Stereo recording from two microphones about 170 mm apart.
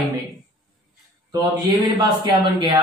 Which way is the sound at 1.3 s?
20° right (ahead or behind).